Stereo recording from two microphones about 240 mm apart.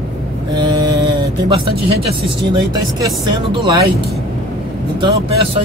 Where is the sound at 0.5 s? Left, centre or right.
Centre.